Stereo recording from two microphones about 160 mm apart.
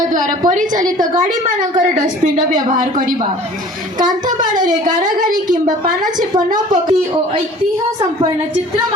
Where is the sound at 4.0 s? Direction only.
25° right (ahead or behind).